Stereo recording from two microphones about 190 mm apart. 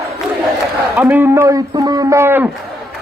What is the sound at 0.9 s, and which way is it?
A man's voice, 10° right (ahead or behind).